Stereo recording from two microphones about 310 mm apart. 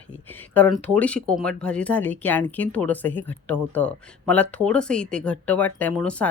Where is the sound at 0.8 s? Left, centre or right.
Centre.